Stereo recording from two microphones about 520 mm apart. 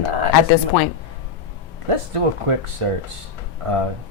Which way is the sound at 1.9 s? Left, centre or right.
Right.